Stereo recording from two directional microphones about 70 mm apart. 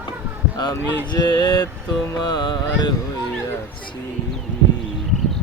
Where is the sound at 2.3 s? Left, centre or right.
Left.